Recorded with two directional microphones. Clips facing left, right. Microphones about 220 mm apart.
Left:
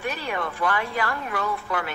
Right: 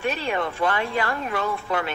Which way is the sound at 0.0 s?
25° right (ahead or behind).